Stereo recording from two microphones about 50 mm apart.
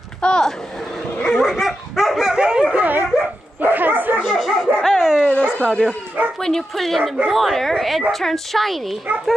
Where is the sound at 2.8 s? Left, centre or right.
Right.